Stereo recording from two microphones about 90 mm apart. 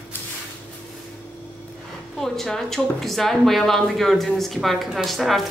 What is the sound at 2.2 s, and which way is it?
Speech, 5° left (ahead or behind).